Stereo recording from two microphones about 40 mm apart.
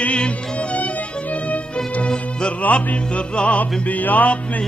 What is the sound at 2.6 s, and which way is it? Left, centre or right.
Music, left.